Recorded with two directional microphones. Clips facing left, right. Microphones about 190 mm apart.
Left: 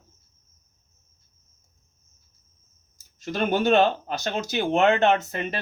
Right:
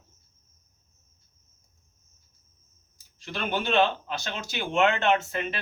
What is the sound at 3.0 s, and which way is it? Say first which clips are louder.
Speech: left 8 dB; 45° left (ahead or behind).